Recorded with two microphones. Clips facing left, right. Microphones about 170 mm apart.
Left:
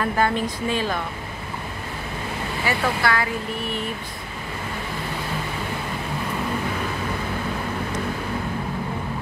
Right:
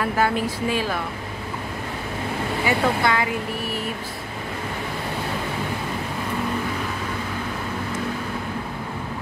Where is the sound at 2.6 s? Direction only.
20° right (ahead or behind).